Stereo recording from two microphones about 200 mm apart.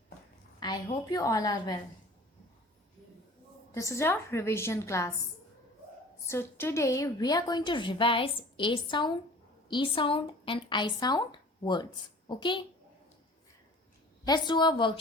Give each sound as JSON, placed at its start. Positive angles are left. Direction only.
{"t": 0.6, "sound": "a woman's voice", "side_deg": 20}
{"t": 3.8, "sound": "a woman's voice", "side_deg": 15}
{"t": 6.2, "sound": "a woman's voice", "side_deg": 10}
{"t": 14.3, "sound": "a woman's voice", "side_deg": 20}